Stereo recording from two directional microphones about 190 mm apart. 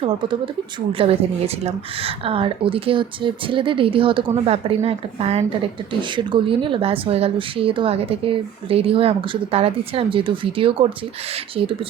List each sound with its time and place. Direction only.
0.0 s a woman's voice: 25° right (ahead or behind)